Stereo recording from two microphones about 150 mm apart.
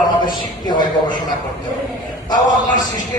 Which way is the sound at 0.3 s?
30° left (ahead or behind).